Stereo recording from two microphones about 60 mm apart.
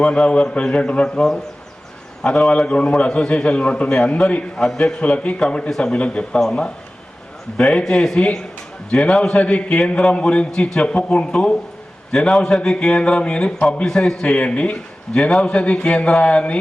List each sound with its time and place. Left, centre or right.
0.0 s a man's voice: centre
4.5 s a man's voice: centre
4.9 s a man's voice: centre
7.7 s a man's voice: centre
9.4 s a man's voice: left